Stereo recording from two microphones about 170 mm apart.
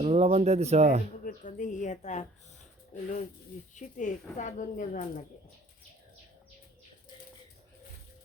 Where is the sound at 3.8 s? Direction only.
45° left (ahead or behind).